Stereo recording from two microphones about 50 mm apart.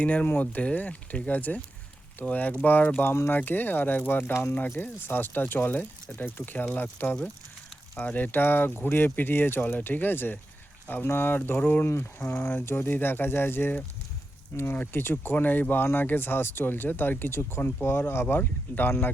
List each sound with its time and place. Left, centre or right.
0.0 s speech: left
12.2 s speech: left
12.5 s speech: left
18.3 s speech: left